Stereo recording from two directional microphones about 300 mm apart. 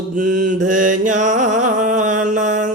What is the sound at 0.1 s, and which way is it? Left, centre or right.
Mantra, right.